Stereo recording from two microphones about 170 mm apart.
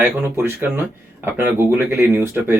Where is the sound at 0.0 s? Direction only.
15° right (ahead or behind).